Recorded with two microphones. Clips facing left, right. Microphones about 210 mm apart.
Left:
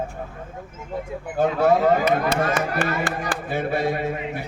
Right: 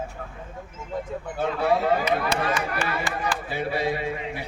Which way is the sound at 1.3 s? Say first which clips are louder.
Left 5 dB; 45° left (ahead or behind).